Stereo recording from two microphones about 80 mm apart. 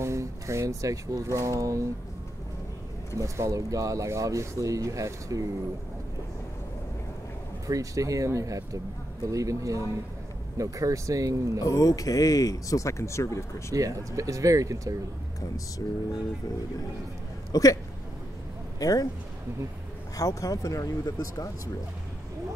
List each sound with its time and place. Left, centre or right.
0.0 s speech: right
3.2 s speech: right
7.6 s speech: right
11.6 s speech: left
13.7 s speech: right
15.8 s speech: left
17.5 s speech: left
18.8 s a man's voice: left
20.2 s speech: left